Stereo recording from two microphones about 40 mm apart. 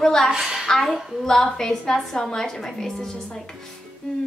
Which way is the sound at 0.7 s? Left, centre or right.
Centre.